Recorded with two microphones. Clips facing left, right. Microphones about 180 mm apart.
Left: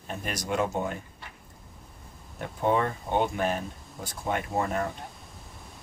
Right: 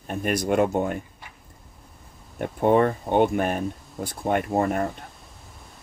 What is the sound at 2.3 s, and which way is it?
Speech, 55° right (ahead or behind).